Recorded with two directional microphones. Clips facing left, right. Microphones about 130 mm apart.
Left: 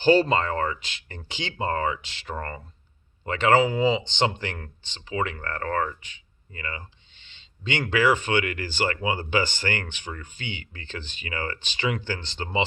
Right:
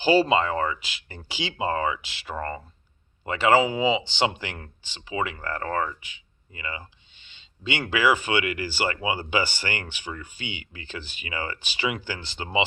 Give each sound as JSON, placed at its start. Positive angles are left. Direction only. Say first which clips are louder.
{"t": 0.0, "sound": "speech", "louder": "even", "side_deg": -5}